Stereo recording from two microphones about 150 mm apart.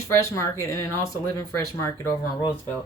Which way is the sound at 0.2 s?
20° left (ahead or behind).